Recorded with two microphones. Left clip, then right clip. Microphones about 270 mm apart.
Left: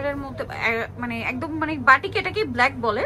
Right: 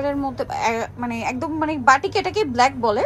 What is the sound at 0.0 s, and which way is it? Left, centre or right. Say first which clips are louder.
A woman's voice: right 4 dB; centre.